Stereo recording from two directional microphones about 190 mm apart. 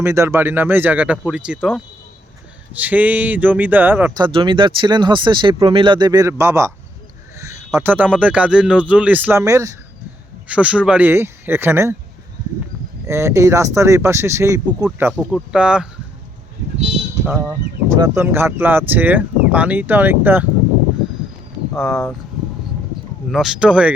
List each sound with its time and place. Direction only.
0.0 s speech: 15° right (ahead or behind)
4.2 s speech: 25° right (ahead or behind)
10.5 s speech: 5° right (ahead or behind)
13.1 s speech: 15° right (ahead or behind)
17.2 s speech: 10° right (ahead or behind)
21.8 s speech: centre (ahead or behind)
23.3 s speech: centre (ahead or behind)